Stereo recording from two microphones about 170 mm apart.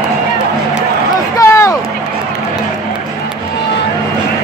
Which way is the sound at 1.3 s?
15° left (ahead or behind).